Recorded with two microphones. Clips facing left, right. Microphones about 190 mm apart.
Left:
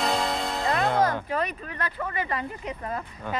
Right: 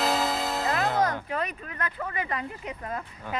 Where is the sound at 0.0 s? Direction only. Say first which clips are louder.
Even; centre (ahead or behind).